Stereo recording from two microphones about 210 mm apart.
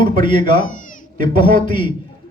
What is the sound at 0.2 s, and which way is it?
A man's voice, 25° left (ahead or behind).